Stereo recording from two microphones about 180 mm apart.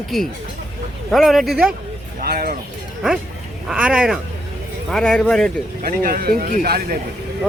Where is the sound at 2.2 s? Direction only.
55° right (ahead or behind).